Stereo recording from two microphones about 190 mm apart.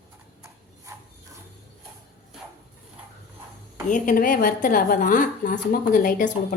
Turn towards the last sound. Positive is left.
turn(degrees=45)  # may be behind; listen again after turning